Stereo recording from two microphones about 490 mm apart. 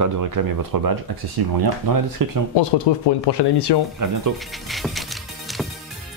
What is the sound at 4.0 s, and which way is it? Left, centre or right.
Speech, right.